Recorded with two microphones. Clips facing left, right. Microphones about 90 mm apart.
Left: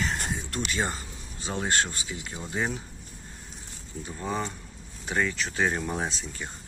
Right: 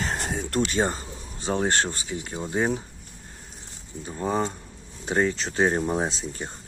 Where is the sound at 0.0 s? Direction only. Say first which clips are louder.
Right 2 dB; 50° right (ahead or behind).